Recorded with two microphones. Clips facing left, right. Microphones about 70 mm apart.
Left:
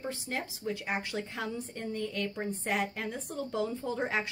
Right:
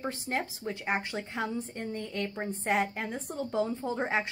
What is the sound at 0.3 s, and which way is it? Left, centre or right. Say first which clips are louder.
A woman's voice: right 2 dB; right.